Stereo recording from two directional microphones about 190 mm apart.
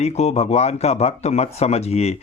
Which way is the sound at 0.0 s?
35° left (ahead or behind).